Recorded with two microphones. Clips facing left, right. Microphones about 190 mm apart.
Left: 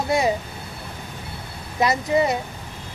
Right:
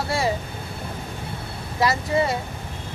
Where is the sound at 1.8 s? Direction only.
20° left (ahead or behind).